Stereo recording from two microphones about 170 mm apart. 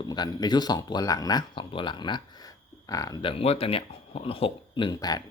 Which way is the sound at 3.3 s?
35° left (ahead or behind).